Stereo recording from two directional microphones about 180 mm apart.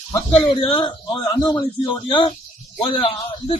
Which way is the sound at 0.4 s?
30° left (ahead or behind).